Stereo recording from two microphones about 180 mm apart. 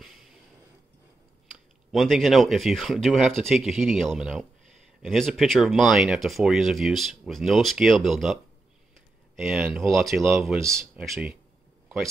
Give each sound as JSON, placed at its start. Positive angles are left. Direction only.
{"t": 1.9, "sound": "speech", "side_deg": 0}
{"t": 9.4, "sound": "speech", "side_deg": 0}
{"t": 10.6, "sound": "speech", "side_deg": -15}